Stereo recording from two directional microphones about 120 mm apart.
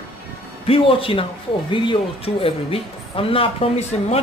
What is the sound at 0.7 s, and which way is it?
Speech, 50° left (ahead or behind).